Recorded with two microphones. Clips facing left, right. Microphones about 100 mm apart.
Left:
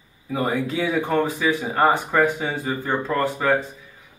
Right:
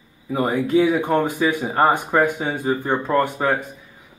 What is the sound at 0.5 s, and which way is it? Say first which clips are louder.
Speech: right 8 dB; 15° right (ahead or behind).